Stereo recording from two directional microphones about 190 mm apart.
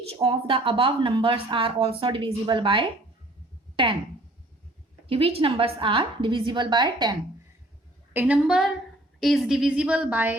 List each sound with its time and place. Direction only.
0.1 s speech: 30° right (ahead or behind)
5.0 s speech: 30° right (ahead or behind)
8.1 s speech: 10° right (ahead or behind)